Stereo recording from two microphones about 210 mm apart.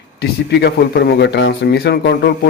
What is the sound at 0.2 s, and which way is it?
A man's voice, 55° left (ahead or behind).